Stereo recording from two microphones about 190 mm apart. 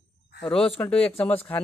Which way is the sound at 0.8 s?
5° left (ahead or behind).